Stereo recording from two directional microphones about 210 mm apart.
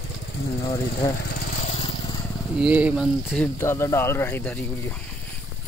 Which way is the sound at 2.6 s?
5° right (ahead or behind).